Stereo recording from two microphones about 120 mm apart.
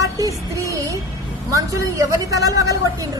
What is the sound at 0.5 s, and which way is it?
Music, 25° right (ahead or behind).